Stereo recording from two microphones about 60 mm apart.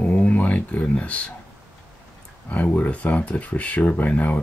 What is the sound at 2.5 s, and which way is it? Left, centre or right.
Speech, left.